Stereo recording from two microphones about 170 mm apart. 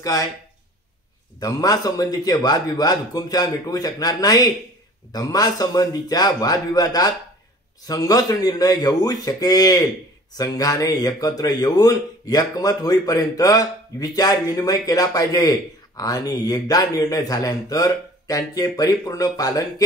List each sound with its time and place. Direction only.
0.0 s speech: 20° left (ahead or behind)
1.4 s speech: 20° left (ahead or behind)